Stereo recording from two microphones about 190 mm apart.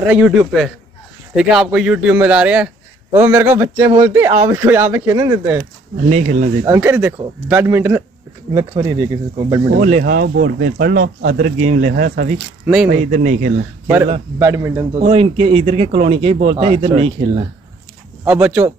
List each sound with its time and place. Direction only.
0.0 s a man's voice: 5° right (ahead or behind)
5.6 s speech: 35° right (ahead or behind)
6.6 s a man's voice: 10° right (ahead or behind)
9.8 s speech: 40° right (ahead or behind)
10.0 s speech: 60° right (ahead or behind); by 13.7 s 45° right (ahead or behind)
14.4 s a man's voice: 15° right (ahead or behind)
15.0 s speech: 35° right (ahead or behind)
18.2 s a man's voice: 10° right (ahead or behind)